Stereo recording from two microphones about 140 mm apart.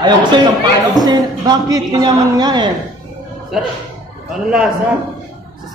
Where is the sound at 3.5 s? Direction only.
5° right (ahead or behind).